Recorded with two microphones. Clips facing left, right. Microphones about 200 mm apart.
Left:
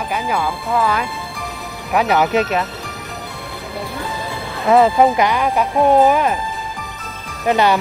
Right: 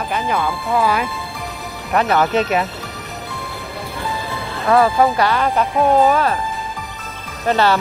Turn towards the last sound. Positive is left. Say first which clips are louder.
# left 1 dB
turn(degrees=15)  # may be behind; listen again after turning